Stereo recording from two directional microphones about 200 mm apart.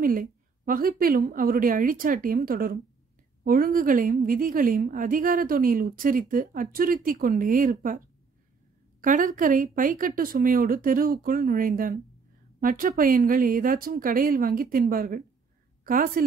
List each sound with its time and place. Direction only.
0.0 s a woman's voice: 45° right (ahead or behind)
9.0 s a woman's voice: 40° right (ahead or behind)